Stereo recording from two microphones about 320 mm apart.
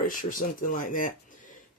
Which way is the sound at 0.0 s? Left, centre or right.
Left.